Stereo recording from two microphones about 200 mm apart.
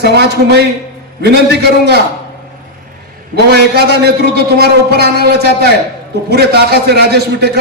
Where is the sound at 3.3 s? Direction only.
55° right (ahead or behind).